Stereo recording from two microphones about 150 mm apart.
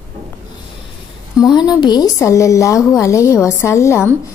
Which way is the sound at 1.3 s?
30° left (ahead or behind).